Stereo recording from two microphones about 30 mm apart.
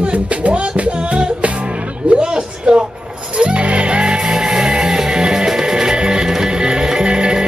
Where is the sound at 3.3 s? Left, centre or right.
Right.